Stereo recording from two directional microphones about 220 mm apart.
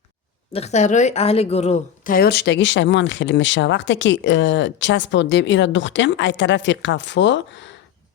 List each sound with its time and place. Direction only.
0.5 s a woman's voice: 30° left (ahead or behind); by 7.8 s 55° left (ahead or behind)